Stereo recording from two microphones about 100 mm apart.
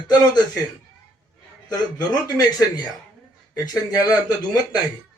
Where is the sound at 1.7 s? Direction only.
40° left (ahead or behind).